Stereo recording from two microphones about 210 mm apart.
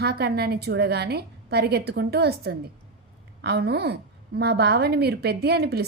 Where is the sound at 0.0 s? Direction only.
50° right (ahead or behind).